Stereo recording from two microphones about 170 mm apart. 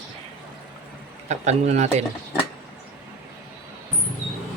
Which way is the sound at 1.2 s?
40° right (ahead or behind).